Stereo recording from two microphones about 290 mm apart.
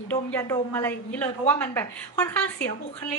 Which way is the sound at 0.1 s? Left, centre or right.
Centre.